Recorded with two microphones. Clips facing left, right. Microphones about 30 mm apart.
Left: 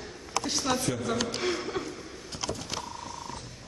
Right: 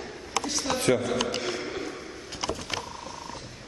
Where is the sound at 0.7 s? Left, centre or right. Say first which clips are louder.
Right 7 dB; right.